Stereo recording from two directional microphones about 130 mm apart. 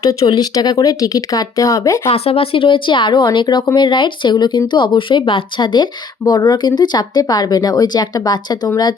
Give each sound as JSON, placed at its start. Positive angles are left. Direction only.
{"t": 0.0, "sound": "speech", "side_deg": 25}
{"t": 2.0, "sound": "speech", "side_deg": 50}